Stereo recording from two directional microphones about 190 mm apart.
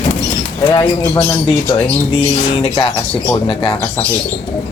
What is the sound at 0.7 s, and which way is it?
Speech, 20° left (ahead or behind).